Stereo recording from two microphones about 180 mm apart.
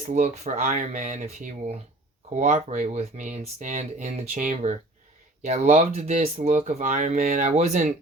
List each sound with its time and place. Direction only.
0.0 s speech: 40° right (ahead or behind)